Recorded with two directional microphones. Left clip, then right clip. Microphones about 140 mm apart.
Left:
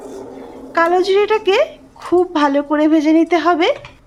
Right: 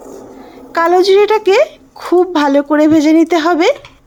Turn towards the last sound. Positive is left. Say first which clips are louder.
# right 3 dB
turn(degrees=-30)  # may be behind; listen again after turning